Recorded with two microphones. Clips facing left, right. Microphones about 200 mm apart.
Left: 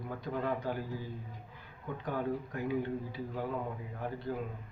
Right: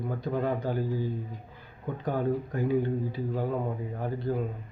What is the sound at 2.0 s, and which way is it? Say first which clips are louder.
Speech: right 6 dB; 35° right (ahead or behind).